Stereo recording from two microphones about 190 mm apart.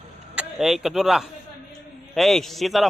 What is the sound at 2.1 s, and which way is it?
Mantra, centre (ahead or behind).